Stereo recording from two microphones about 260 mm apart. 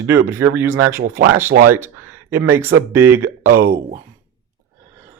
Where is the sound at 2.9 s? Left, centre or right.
Centre.